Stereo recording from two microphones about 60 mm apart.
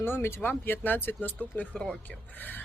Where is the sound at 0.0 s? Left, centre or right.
Left.